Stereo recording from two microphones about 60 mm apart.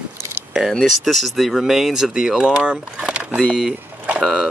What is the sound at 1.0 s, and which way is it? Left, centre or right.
Speech, centre.